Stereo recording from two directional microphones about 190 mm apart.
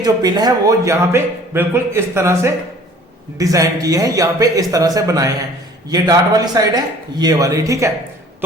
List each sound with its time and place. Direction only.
0.0 s a man's voice: 20° right (ahead or behind)